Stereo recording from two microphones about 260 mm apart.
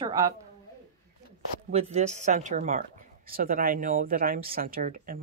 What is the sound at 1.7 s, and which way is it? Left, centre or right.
Speech, right.